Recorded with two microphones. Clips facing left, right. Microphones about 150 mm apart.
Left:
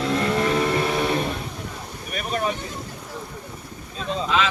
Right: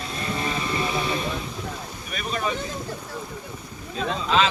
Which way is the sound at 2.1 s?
50° left (ahead or behind).